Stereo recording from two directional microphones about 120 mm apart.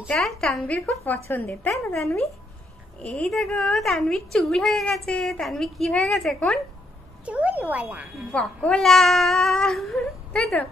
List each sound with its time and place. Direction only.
0.1 s a woman's voice: 5° left (ahead or behind)
0.7 s speech: 15° left (ahead or behind)
3.0 s a woman's voice: 10° left (ahead or behind)
7.2 s speech: 10° right (ahead or behind)
8.6 s a woman's voice: 5° left (ahead or behind)